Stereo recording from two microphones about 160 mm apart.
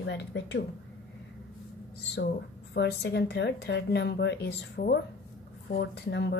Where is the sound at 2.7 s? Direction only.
90° left.